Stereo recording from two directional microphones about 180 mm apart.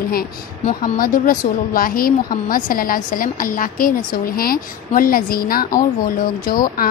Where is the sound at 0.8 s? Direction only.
50° left (ahead or behind).